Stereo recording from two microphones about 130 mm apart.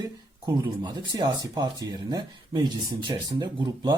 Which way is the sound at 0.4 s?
30° right (ahead or behind).